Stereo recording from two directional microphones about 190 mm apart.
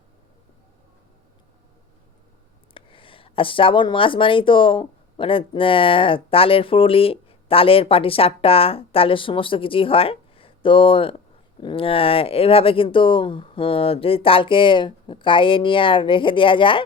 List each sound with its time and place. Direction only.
2.7 s speech: 25° left (ahead or behind)